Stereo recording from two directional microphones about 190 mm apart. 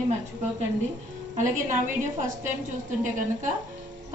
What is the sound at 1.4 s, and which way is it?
A woman's voice, 40° right (ahead or behind).